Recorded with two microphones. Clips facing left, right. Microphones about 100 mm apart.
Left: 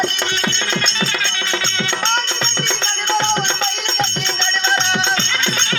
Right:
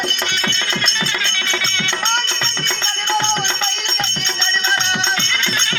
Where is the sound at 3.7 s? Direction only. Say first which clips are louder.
Left 3 dB; 25° left (ahead or behind).